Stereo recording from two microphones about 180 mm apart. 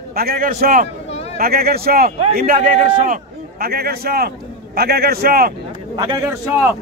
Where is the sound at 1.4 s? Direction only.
55° right (ahead or behind).